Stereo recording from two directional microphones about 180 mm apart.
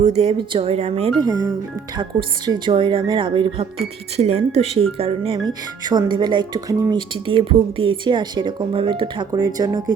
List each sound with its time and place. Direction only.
0.0 s speech: 35° right (ahead or behind)